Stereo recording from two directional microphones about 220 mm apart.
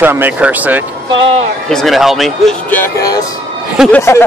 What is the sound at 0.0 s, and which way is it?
Speech, 10° right (ahead or behind).